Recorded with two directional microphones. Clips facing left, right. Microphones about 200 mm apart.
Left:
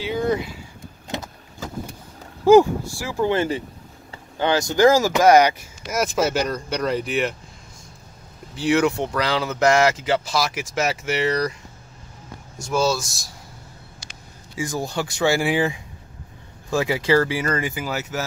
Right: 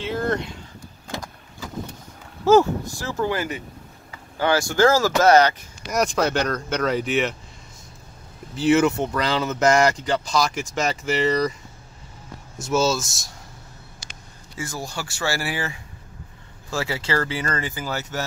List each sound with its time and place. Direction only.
0.0 s a sound: centre (ahead or behind)
2.4 s speech: 15° left (ahead or behind)
3.3 s speech: 30° left (ahead or behind); by 7.3 s centre (ahead or behind)
8.5 s speech: centre (ahead or behind)
12.5 s speech: 5° right (ahead or behind)
14.6 s speech: 15° left (ahead or behind)